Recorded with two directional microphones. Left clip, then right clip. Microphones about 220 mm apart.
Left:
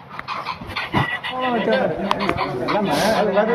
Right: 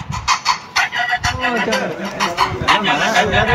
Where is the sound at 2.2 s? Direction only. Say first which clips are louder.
Right 5 dB; 50° right (ahead or behind).